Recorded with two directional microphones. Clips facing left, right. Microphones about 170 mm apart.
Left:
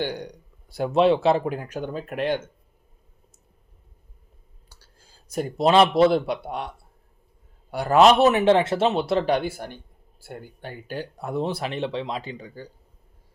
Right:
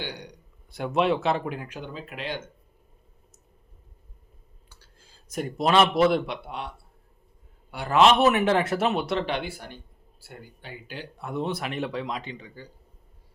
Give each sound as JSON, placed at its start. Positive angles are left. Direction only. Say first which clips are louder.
{"t": 0.0, "sound": "speech", "louder": "left 8 dB", "side_deg": 50}
{"t": 0.7, "sound": "speech", "louder": "left 5 dB", "side_deg": 35}
{"t": 4.7, "sound": "a sound", "louder": "left 1 dB", "side_deg": 40}
{"t": 6.0, "sound": "speech", "louder": "left 3 dB", "side_deg": 30}
{"t": 7.7, "sound": "speech", "louder": "left 3 dB", "side_deg": 40}